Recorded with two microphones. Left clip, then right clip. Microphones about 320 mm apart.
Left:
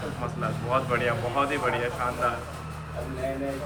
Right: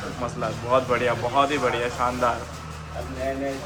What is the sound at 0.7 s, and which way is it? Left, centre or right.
A man's voice, centre.